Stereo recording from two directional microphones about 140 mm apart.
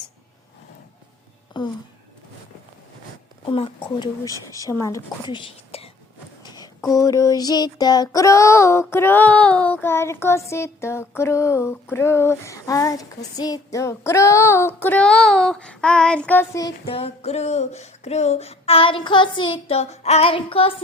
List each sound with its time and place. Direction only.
1.5 s speech: 35° left (ahead or behind)
3.4 s speech: 40° left (ahead or behind)
4.5 s child singing: 25° left (ahead or behind)
5.3 s whispering: 40° left (ahead or behind)
6.4 s a sound: 30° left (ahead or behind)
6.9 s child singing: 25° left (ahead or behind)
16.8 s a sound: 45° left (ahead or behind)